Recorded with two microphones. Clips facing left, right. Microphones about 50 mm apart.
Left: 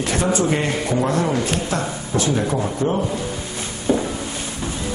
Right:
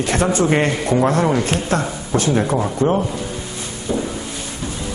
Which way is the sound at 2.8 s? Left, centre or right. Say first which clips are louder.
Right 5 dB; centre.